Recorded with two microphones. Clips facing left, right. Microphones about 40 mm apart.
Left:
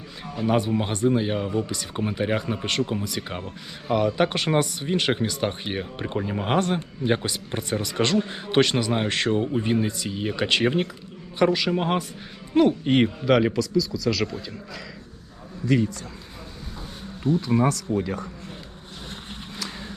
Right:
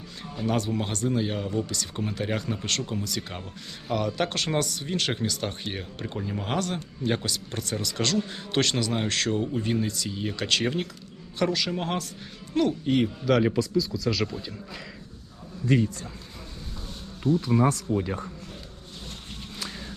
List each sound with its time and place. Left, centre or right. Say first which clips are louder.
0.3 s a man's voice: left 4 dB; centre
12.8 s speech: left 4 dB; left
13.2 s a man's voice: left 2 dB; centre
13.5 s speech: left 2 dB; centre
14.1 s a man's voice: left 3 dB; centre
17.2 s speech: left 1 dB; left